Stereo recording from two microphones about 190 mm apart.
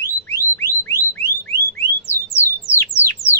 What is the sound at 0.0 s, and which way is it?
Alarm, 15° left (ahead or behind).